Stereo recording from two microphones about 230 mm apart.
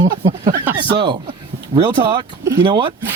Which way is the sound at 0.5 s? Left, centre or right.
Centre.